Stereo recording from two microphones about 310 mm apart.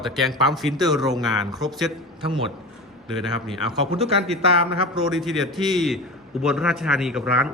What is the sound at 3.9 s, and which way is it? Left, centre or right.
Speech, centre.